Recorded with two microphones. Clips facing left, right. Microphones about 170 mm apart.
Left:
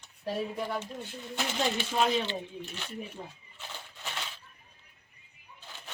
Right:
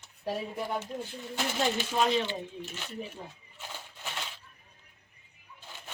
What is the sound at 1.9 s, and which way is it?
Speech, 5° left (ahead or behind).